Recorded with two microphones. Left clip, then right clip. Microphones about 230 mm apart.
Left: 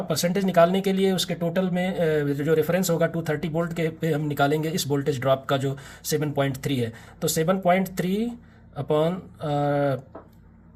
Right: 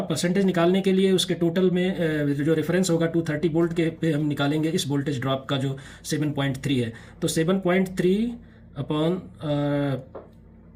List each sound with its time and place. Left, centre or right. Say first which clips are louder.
0.2 s speech: left 4 dB; left